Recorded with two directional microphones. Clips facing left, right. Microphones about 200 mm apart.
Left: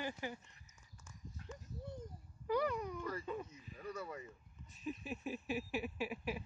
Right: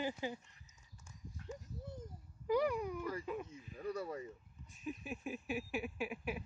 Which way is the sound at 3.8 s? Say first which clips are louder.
Right 5 dB; 35° right (ahead or behind).